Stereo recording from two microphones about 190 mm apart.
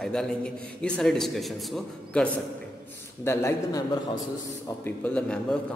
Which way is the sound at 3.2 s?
15° left (ahead or behind).